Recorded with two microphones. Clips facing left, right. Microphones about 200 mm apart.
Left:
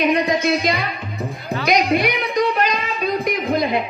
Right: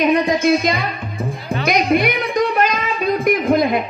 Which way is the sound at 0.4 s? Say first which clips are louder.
Right 3 dB; 50° right (ahead or behind).